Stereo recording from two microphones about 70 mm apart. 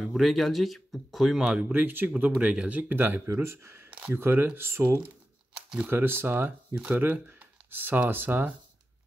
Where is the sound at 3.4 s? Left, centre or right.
Right.